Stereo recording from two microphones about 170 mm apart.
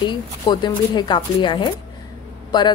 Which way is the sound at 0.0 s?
25° left (ahead or behind).